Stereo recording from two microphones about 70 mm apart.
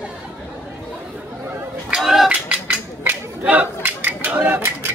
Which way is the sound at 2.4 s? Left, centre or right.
Right.